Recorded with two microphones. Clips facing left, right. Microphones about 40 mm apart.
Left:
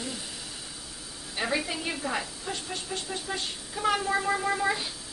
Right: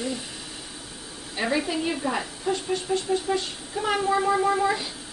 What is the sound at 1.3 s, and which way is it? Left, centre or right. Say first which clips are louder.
A woman's voice: right 4 dB; centre.